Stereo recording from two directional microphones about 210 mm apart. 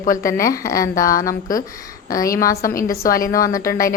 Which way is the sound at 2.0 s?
15° left (ahead or behind).